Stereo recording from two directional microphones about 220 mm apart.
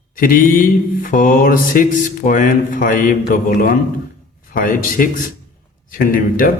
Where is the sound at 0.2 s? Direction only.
40° left (ahead or behind).